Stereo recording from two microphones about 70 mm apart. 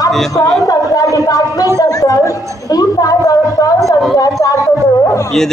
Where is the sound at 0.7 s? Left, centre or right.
Left.